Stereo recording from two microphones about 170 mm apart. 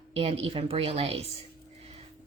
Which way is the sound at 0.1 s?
35° right (ahead or behind).